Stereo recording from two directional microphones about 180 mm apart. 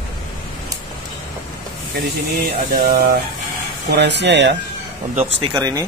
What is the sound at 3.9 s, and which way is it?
Speech, 70° right (ahead or behind).